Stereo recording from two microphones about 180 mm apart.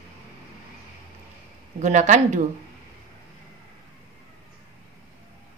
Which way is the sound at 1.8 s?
40° right (ahead or behind).